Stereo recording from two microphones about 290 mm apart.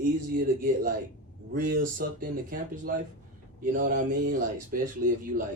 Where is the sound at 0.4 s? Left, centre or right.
Right.